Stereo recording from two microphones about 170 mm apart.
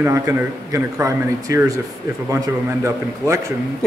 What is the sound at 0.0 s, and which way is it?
A man's voice, 15° right (ahead or behind).